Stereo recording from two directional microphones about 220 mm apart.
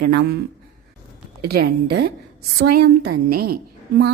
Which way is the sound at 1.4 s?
45° right (ahead or behind).